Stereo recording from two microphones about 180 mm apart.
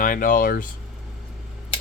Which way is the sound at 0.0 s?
50° left (ahead or behind).